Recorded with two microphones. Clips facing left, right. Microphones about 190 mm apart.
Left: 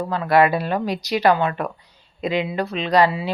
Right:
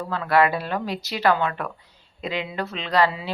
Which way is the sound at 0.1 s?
15° left (ahead or behind).